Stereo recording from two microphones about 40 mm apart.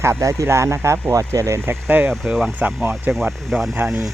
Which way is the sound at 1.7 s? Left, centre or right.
Right.